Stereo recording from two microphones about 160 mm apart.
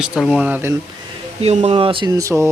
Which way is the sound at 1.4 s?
40° right (ahead or behind).